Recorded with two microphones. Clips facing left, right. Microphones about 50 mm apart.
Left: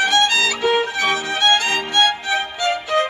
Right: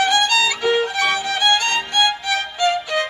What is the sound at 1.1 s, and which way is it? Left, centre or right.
Music, centre.